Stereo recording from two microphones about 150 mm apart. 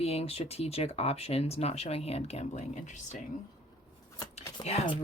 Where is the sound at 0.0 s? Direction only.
40° left (ahead or behind).